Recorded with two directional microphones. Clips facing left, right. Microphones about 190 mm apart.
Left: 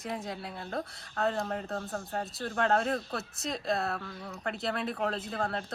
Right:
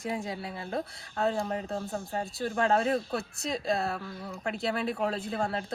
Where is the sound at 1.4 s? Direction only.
10° right (ahead or behind).